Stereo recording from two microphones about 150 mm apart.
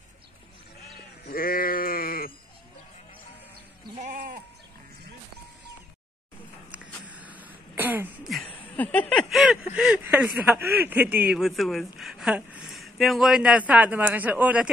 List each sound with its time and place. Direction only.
1.2 s sheep: 75° left (ahead or behind)
4.0 s sheep: 70° right (ahead or behind)
6.7 s throat clearing: 10° right (ahead or behind)
8.7 s a sound: 10° left (ahead or behind)
9.3 s speech: 5° right (ahead or behind)